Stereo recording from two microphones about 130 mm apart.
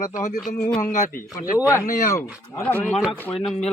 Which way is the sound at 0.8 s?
90° left.